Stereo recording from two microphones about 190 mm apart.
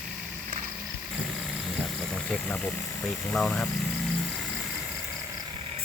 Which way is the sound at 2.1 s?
5° left (ahead or behind).